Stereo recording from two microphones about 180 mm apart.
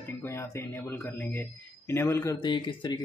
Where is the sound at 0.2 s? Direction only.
15° left (ahead or behind).